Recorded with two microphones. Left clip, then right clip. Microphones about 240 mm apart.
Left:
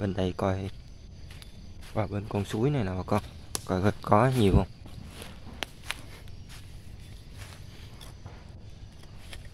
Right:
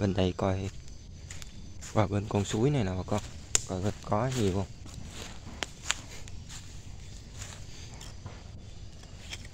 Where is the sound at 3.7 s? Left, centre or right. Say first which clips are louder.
Left 13 dB; centre.